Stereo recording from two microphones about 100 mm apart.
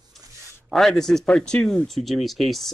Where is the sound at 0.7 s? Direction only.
5° left (ahead or behind).